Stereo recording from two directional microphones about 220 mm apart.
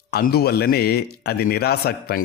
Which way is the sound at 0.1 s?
45° left (ahead or behind).